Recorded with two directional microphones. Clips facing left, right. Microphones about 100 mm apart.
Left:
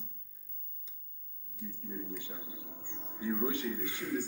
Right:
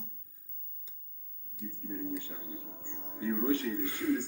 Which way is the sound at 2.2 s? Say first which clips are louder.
Right 4 dB; 15° left (ahead or behind).